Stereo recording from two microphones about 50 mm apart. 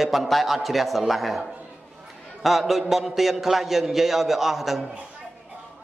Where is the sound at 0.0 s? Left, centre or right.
Centre.